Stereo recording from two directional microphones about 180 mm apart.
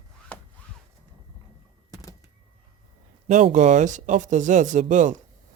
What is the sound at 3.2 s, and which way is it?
Speech, 40° right (ahead or behind).